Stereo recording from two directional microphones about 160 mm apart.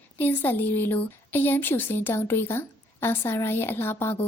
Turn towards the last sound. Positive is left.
turn(degrees=15)  # may be behind; listen again after turning